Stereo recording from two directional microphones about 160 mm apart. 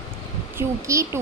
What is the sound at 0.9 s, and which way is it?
Speech, 20° right (ahead or behind).